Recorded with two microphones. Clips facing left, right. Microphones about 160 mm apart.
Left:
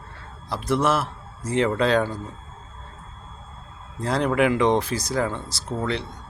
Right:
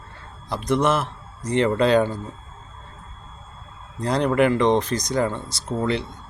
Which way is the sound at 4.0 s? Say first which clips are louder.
Right 2 dB; centre (ahead or behind).